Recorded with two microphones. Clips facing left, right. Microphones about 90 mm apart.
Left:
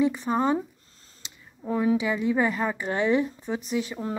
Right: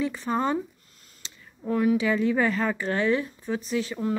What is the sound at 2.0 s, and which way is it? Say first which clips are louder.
A woman's voice: right 1 dB; 15° left (ahead or behind).